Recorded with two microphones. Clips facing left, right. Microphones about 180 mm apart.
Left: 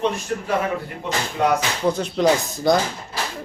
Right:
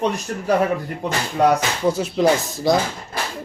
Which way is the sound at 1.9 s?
5° right (ahead or behind).